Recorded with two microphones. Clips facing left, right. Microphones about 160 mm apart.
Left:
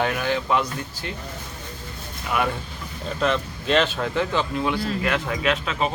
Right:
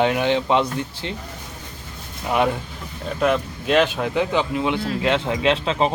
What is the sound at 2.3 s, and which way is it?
Speech, 25° right (ahead or behind).